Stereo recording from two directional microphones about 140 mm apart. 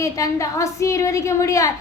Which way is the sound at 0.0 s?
25° left (ahead or behind).